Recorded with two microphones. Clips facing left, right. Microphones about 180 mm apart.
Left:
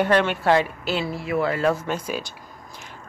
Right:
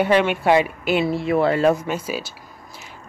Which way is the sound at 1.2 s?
30° right (ahead or behind).